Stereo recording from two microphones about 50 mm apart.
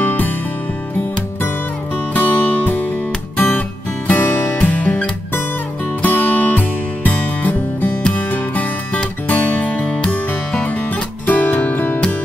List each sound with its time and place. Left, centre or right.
0.0 s music: left
2.1 s music: left